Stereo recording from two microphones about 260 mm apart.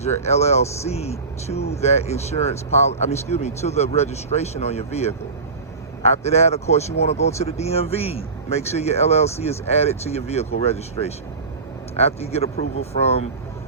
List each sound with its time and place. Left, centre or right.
0.3 s speech: left